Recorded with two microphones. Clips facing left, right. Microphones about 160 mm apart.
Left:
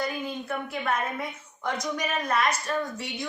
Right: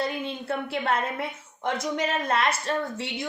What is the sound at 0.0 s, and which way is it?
A woman's voice, 30° right (ahead or behind).